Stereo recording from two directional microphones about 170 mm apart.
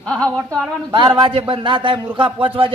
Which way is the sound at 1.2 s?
30° right (ahead or behind).